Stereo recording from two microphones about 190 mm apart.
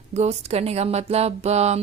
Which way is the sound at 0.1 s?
35° right (ahead or behind).